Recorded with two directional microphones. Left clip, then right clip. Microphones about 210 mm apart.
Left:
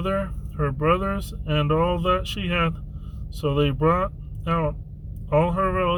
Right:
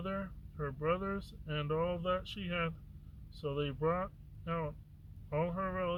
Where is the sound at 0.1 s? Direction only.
25° right (ahead or behind).